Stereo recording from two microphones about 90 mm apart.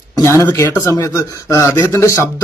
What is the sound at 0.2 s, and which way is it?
Speech, 35° left (ahead or behind).